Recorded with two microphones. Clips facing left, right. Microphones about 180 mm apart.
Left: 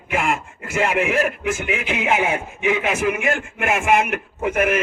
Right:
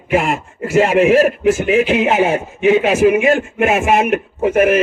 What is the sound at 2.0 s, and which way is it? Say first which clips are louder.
A man's voice: right 6 dB; 25° right (ahead or behind).